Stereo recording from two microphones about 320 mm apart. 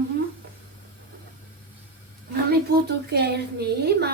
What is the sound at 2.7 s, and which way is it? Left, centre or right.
Speech, right.